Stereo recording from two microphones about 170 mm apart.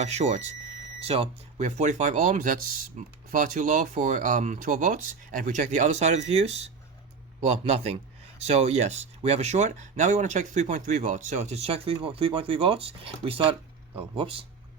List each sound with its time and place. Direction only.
0.0 s speech: 40° right (ahead or behind)